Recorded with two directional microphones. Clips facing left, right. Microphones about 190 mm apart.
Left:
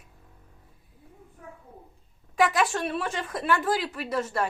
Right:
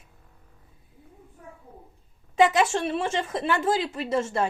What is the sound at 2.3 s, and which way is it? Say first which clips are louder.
A woman's voice: right 3 dB; 25° right (ahead or behind).